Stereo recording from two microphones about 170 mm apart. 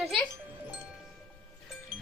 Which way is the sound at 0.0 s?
Centre (ahead or behind).